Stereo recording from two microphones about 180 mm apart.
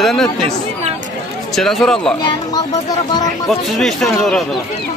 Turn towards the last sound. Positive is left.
turn(degrees=0)  # may be behind; listen again after turning